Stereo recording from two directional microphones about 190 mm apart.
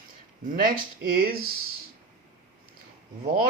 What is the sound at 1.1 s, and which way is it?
Speech, 50° right (ahead or behind).